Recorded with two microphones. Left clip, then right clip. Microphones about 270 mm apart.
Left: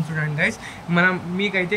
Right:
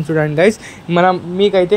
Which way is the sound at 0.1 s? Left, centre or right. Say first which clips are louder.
Right 11 dB; centre.